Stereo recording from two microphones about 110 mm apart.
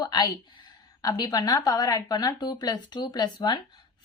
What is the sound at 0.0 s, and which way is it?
Speech, 40° left (ahead or behind).